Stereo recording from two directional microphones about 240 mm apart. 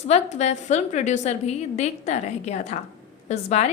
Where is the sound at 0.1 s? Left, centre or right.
Left.